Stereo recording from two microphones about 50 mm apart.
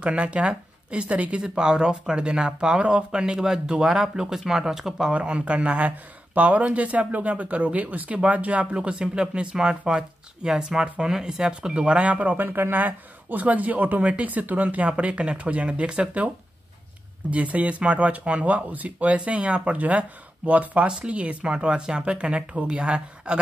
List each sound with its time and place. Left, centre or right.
0.0 s speech: right; by 5.1 s centre
5.1 s speech: right
12.4 s speech: right
17.3 s speech: right